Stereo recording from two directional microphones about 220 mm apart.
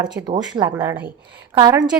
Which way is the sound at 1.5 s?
20° right (ahead or behind).